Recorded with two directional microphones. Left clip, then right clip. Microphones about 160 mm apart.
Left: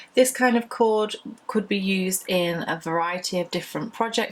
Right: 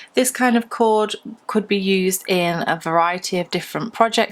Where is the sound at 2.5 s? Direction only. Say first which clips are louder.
Right 6 dB; 35° right (ahead or behind).